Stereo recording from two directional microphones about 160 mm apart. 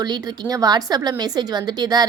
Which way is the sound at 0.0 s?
25° right (ahead or behind).